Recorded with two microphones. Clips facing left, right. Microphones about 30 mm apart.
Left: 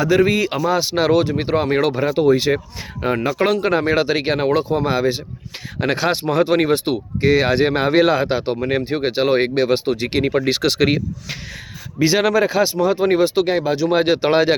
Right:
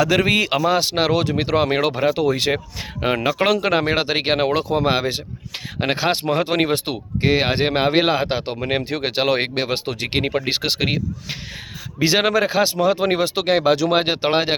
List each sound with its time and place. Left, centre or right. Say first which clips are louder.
0.0 s speech: left 1 dB; right
1.7 s speech: left 2 dB; right
2.1 s speech: left 4 dB; right
3.0 s speech: even; right
4.8 s speech: left 1 dB; right
5.8 s speech: left 2 dB; right
6.1 s speech: left 4 dB; right
7.2 s speech: left 3 dB; right
9.0 s speech: left 3 dB; right
10.1 s speech: even; right
10.3 s speech: left 4 dB; right
11.9 s speech: left 2 dB; right
13.9 s speech: left 3 dB; right
14.3 s speech: left 4 dB; right